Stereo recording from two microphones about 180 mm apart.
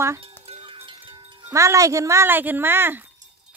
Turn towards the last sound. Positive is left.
turn(degrees=-10)  # may be behind; listen again after turning